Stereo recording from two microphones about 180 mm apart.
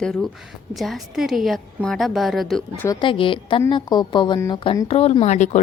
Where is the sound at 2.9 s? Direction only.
30° left (ahead or behind).